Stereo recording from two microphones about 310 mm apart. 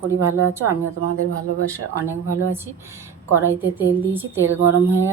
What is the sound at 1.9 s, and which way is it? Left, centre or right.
Speech, centre.